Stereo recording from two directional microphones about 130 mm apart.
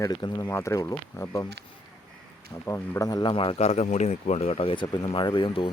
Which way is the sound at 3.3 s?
45° left (ahead or behind).